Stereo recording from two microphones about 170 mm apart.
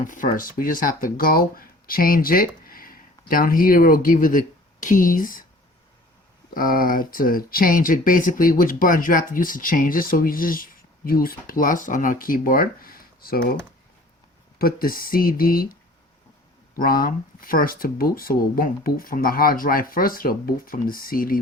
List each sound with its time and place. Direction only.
0.0 s speech: 50° left (ahead or behind)
6.5 s speech: 55° left (ahead or behind)
14.6 s speech: 60° left (ahead or behind)